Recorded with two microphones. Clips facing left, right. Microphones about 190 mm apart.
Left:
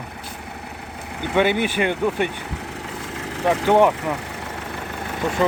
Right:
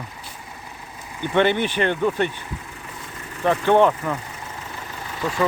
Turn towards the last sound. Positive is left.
turn(degrees=60)  # may be behind; listen again after turning